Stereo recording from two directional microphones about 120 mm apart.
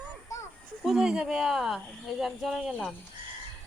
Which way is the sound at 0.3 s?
25° left (ahead or behind).